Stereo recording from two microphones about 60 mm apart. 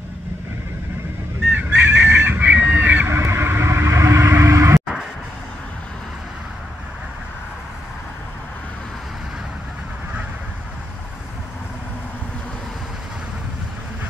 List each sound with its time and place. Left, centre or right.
1.5 s fowl: centre
2.2 s duck: right
3.1 s vehicle: right